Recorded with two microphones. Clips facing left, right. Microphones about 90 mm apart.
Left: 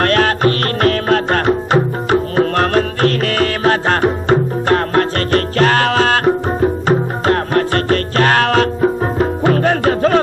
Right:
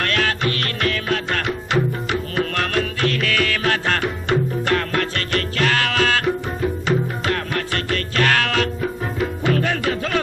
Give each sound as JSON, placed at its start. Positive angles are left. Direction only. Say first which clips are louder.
{"t": 0.0, "sound": "music", "louder": "left 8 dB", "side_deg": 40}